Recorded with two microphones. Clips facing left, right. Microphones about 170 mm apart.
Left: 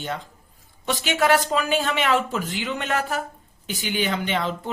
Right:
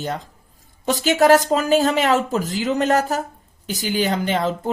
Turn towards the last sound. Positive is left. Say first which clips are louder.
# right 4 dB
turn(degrees=-40)  # may be behind; listen again after turning